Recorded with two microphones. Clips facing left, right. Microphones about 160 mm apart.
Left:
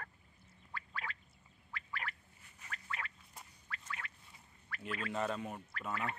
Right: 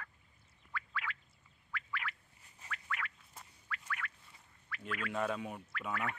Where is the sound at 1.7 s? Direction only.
35° left (ahead or behind).